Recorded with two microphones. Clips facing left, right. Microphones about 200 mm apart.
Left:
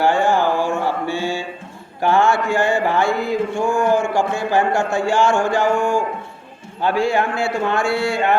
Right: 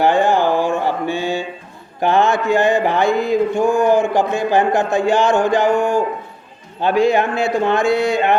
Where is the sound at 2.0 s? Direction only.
20° right (ahead or behind).